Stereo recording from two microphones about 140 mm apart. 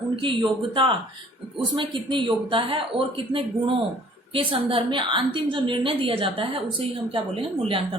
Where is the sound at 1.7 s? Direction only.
35° right (ahead or behind).